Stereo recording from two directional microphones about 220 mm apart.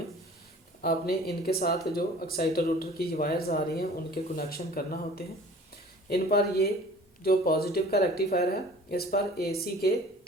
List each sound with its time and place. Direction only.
0.8 s speech: 45° left (ahead or behind)